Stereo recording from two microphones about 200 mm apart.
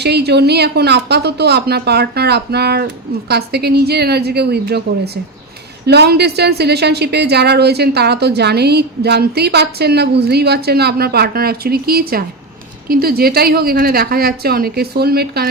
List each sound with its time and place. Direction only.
0.0 s a woman's voice: 55° right (ahead or behind)